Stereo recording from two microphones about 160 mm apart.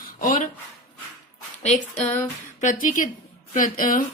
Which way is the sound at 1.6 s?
45° left (ahead or behind).